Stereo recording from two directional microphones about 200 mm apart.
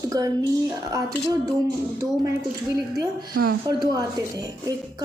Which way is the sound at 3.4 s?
55° right (ahead or behind).